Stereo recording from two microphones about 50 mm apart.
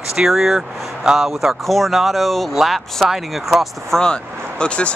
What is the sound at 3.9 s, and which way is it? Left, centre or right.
Speech, centre.